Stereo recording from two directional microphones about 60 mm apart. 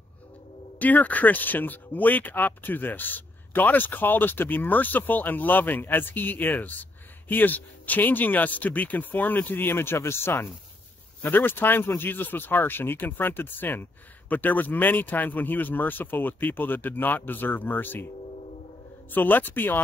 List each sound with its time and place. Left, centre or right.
0.7 s speech: left
19.1 s speech: left